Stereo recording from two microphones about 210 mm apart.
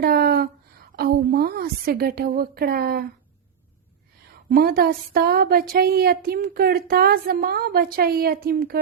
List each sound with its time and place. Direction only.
0.0 s a sound: 45° right (ahead or behind)
0.9 s speech: 45° right (ahead or behind)
4.4 s speech: 45° right (ahead or behind)